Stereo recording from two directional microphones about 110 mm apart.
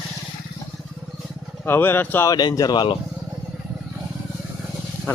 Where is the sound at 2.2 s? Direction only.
35° left (ahead or behind).